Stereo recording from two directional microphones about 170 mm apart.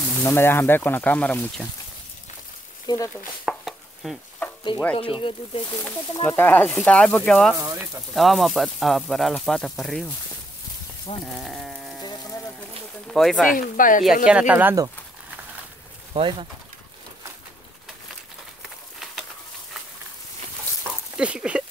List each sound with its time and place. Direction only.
0.2 s speech: 15° left (ahead or behind)
2.9 s stir: 20° left (ahead or behind)
3.4 s chopping: centre (ahead or behind)
4.9 s speech: 30° left (ahead or behind)
6.2 s speech: 10° left (ahead or behind)
7.5 s speech: 20° right (ahead or behind)
8.1 s speech: centre (ahead or behind)
11.2 s a sound: centre (ahead or behind)
12.0 s a sound: 25° left (ahead or behind)
13.1 s speech: centre (ahead or behind)
13.6 s speech: 55° left (ahead or behind)
14.2 s speech: 5° right (ahead or behind)
16.1 s speech: 30° right (ahead or behind)
21.2 s speech: 5° right (ahead or behind)